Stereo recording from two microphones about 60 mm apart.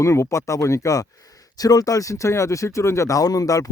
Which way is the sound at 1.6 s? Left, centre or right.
Left.